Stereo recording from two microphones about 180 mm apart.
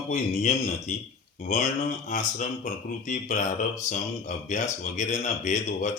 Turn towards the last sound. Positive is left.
turn(degrees=45)  # may be behind; listen again after turning